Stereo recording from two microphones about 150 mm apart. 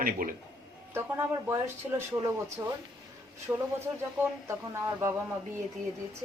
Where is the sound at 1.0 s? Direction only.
15° right (ahead or behind).